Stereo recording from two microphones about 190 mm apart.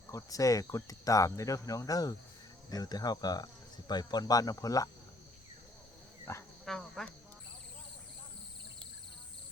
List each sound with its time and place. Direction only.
0.1 s speech: 15° left (ahead or behind)
6.3 s speech: 15° left (ahead or behind)
6.7 s speech: centre (ahead or behind)